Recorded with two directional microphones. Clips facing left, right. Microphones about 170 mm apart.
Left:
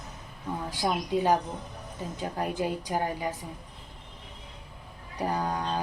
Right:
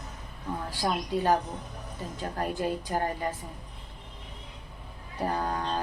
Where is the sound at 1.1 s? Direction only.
15° left (ahead or behind).